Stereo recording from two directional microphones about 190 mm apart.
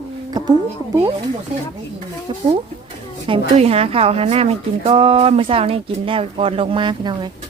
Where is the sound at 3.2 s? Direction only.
30° right (ahead or behind).